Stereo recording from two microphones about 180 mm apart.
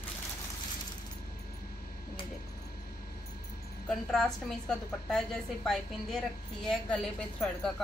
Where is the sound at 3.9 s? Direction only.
Centre (ahead or behind).